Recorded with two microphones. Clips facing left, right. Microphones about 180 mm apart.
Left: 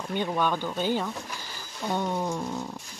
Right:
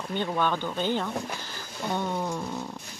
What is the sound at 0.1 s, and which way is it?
Speech, 10° left (ahead or behind).